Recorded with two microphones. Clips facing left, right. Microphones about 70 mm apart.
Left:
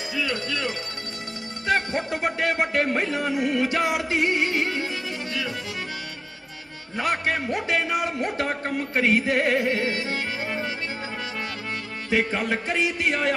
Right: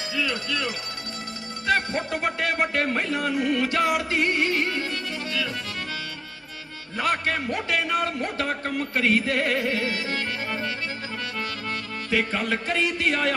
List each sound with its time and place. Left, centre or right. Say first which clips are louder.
0.1 s speech: even; left
6.9 s speech: even; left
12.1 s speech: left 1 dB; left